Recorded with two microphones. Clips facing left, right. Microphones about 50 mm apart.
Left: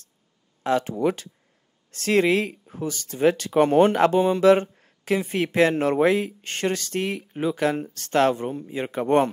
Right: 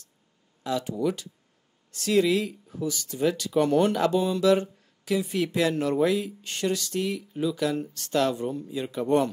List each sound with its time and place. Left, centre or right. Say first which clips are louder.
0.7 s speech: left 5 dB; left